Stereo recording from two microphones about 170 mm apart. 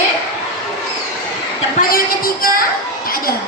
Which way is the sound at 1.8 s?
60° left (ahead or behind).